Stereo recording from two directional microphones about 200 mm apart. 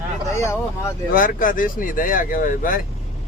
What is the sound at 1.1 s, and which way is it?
Speech, 45° left (ahead or behind).